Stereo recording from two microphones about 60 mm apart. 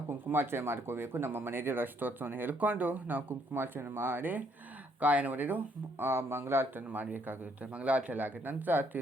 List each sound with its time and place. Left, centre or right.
0.1 s speech: right
6.9 s speech: right